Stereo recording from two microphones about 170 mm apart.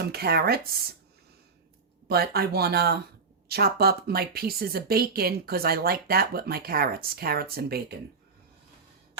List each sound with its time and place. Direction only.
0.0 s speech: 65° right (ahead or behind)
2.0 s speech: 65° right (ahead or behind)